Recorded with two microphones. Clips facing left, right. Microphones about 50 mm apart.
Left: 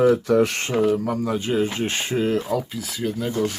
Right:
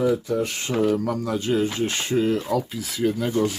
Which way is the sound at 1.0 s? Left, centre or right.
Centre.